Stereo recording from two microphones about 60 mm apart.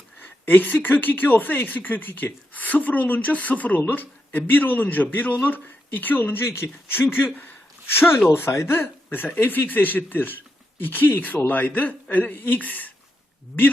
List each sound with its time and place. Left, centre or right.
0.2 s speech: left
6.4 s speech: left